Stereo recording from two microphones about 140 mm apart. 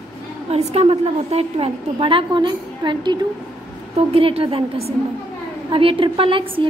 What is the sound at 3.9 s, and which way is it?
Speech, 45° right (ahead or behind).